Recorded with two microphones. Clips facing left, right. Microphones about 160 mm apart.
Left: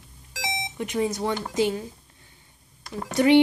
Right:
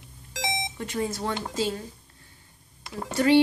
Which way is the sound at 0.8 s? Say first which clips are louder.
Left 5 dB; 15° left (ahead or behind).